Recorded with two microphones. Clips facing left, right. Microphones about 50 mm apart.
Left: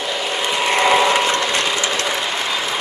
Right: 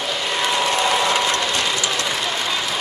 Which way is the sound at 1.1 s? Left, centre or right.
Left.